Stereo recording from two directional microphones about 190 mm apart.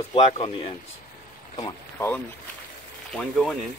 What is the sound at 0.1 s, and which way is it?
Speech, 30° left (ahead or behind).